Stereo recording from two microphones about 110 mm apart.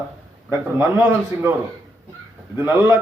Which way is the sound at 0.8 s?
15° right (ahead or behind).